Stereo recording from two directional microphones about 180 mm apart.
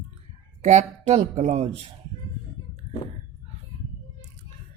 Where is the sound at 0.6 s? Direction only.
35° right (ahead or behind).